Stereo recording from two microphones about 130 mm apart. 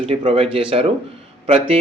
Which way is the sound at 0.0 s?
45° right (ahead or behind).